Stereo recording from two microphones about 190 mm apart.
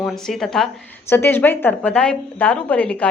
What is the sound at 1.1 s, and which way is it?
A woman's voice, 10° left (ahead or behind).